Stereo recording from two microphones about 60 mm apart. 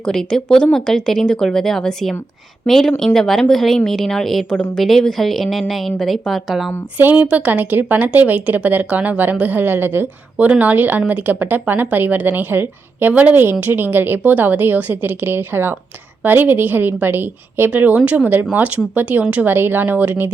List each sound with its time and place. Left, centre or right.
0.0 s speech: centre
7.0 s a woman's voice: right
10.3 s a woman's voice: right
19.5 s speech: right